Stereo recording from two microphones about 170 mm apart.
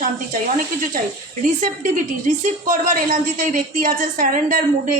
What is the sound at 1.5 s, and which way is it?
A woman's voice, 45° right (ahead or behind).